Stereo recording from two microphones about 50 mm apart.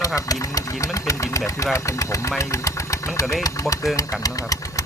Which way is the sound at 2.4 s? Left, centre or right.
Left.